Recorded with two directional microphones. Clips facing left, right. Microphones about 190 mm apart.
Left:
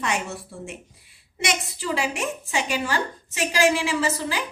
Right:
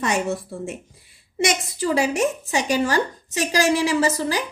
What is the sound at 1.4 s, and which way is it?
A woman's voice, 45° right (ahead or behind).